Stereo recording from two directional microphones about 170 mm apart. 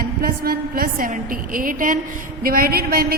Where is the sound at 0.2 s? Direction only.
60° right (ahead or behind).